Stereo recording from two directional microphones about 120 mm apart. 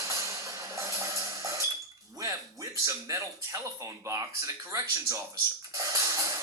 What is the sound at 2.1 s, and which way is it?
Speech, 25° right (ahead or behind).